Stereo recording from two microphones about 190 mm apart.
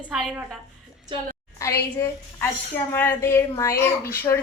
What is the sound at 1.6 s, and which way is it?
A woman's voice, 15° left (ahead or behind).